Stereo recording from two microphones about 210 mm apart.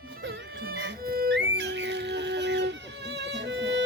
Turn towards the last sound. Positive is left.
turn(degrees=-55)  # may be behind; listen again after turning